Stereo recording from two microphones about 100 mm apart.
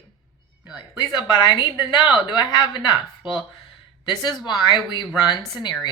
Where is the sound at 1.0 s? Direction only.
45° left (ahead or behind).